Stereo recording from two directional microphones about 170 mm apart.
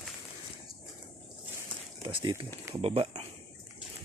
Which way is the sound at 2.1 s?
30° right (ahead or behind).